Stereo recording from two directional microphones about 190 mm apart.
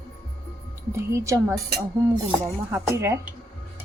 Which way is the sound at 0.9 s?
15° right (ahead or behind).